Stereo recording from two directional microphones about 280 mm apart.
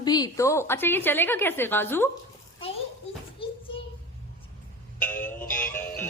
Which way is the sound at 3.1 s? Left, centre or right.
Left.